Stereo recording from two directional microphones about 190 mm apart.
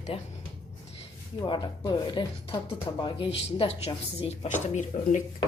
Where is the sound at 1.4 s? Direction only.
25° left (ahead or behind).